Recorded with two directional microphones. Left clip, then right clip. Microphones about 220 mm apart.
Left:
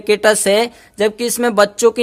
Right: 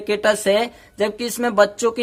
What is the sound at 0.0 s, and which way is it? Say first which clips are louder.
Speech: left 5 dB; 45° left (ahead or behind).